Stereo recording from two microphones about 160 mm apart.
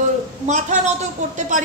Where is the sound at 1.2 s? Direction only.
50° right (ahead or behind).